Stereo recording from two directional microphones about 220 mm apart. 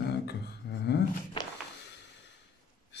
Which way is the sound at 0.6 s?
50° left (ahead or behind).